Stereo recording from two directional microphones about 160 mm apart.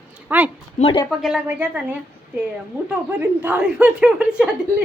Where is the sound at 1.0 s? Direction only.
5° right (ahead or behind).